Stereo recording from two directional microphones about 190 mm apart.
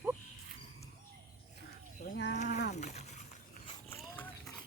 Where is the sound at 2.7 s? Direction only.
35° left (ahead or behind).